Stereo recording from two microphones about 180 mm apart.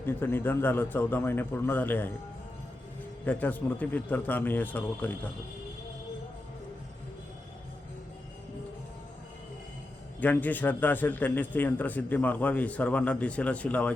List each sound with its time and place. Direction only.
0.0 s a man's voice: 10° left (ahead or behind)
3.2 s a man's voice: 10° left (ahead or behind)
10.2 s a man's voice: 10° left (ahead or behind)